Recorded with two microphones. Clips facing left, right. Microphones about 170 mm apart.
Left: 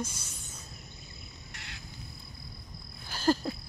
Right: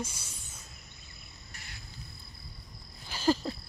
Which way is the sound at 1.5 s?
70° left (ahead or behind).